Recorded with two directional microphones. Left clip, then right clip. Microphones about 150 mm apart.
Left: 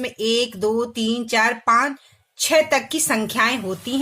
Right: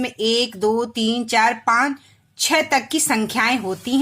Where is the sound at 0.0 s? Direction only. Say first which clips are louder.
Right 1 dB; 25° right (ahead or behind).